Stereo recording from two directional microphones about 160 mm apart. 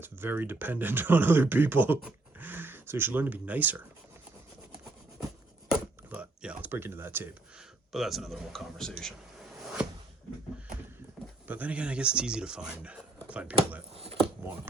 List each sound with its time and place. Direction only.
0.0 s speech: 15° right (ahead or behind)
6.1 s speech: 10° right (ahead or behind)
7.9 s a man's voice: centre (ahead or behind)
11.4 s speech: 10° right (ahead or behind)
13.9 s a sound: 40° right (ahead or behind)